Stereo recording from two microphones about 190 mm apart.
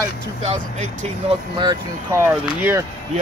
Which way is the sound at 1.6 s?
20° right (ahead or behind).